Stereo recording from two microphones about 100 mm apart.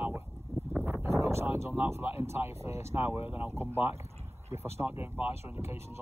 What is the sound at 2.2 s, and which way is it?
Speech, 25° right (ahead or behind).